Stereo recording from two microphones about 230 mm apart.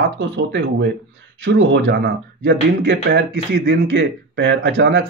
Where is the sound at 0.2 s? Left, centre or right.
Right.